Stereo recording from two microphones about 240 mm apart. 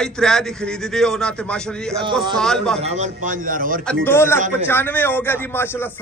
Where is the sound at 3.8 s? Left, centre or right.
Centre.